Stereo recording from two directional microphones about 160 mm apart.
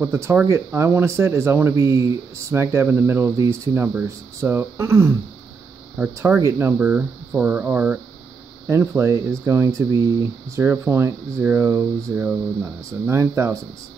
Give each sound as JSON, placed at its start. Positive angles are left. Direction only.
{"t": 0.0, "sound": "speech", "side_deg": -15}